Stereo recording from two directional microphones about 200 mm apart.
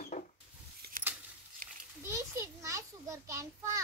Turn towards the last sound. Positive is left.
turn(degrees=-15)  # may be behind; listen again after turning